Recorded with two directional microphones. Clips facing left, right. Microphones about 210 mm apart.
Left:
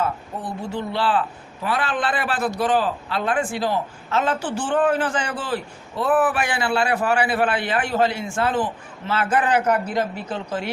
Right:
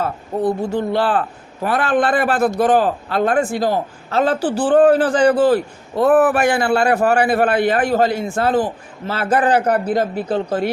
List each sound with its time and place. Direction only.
0.0 s a man's voice: 45° right (ahead or behind)